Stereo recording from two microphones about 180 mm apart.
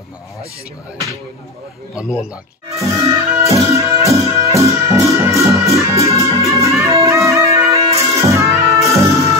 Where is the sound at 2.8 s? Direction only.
15° right (ahead or behind).